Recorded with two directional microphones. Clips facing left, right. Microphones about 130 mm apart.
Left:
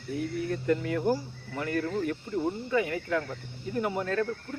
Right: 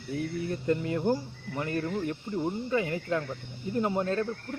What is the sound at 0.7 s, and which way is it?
Speech, 25° right (ahead or behind).